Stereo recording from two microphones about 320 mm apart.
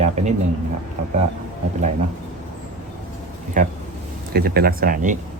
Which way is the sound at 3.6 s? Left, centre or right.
Right.